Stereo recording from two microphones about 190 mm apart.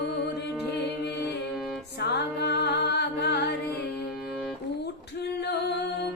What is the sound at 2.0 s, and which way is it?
Music, 60° left (ahead or behind).